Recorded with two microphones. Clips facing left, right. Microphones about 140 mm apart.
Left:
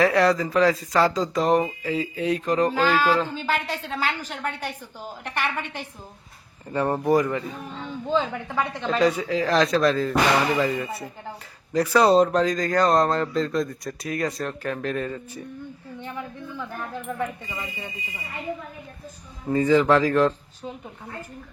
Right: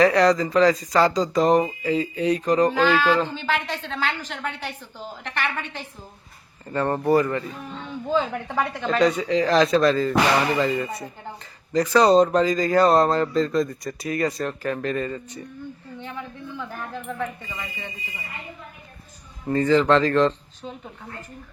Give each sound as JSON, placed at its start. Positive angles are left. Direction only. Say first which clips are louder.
{"t": 0.0, "sound": "a woman's voice", "louder": "right 2 dB", "side_deg": 0}
{"t": 6.7, "sound": "a woman's voice", "louder": "right 1 dB", "side_deg": 10}
{"t": 8.1, "sound": "speech", "louder": "right 1 dB", "side_deg": 0}
{"t": 16.6, "sound": "speech", "louder": "even", "side_deg": 5}
{"t": 17.2, "sound": "a woman's voice", "louder": "left 1 dB", "side_deg": 15}
{"t": 19.5, "sound": "a woman's voice", "louder": "even", "side_deg": 10}